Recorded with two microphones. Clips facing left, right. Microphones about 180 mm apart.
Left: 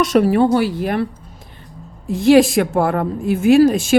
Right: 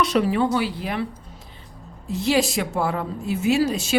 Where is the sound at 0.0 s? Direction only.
50° left (ahead or behind).